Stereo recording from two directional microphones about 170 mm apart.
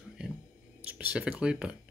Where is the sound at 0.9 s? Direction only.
10° right (ahead or behind).